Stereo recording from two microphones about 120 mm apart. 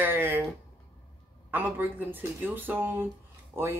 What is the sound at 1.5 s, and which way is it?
Speech, 15° right (ahead or behind).